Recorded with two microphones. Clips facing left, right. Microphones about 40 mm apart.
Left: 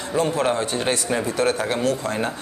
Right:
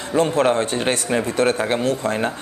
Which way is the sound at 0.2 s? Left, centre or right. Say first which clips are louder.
Right 4 dB; right.